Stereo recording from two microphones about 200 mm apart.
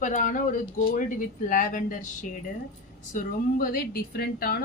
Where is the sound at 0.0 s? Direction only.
40° left (ahead or behind).